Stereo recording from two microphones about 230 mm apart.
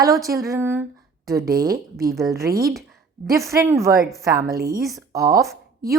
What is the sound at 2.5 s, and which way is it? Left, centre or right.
Speech, right.